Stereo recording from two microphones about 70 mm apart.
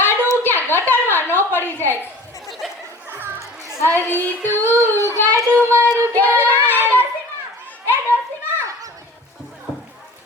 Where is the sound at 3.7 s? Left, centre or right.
Left.